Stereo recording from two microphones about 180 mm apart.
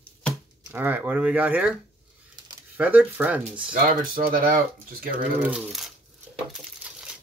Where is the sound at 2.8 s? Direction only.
10° right (ahead or behind).